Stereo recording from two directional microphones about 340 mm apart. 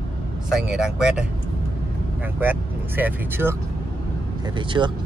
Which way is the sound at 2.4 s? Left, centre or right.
Centre.